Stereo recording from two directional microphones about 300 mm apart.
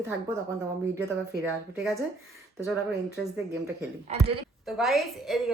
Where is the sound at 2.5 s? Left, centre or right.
Centre.